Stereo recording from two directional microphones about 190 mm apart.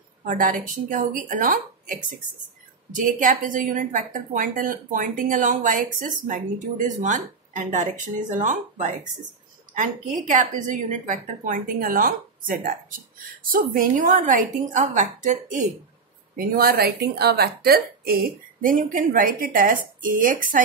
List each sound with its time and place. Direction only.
0.2 s a woman's voice: 45° right (ahead or behind)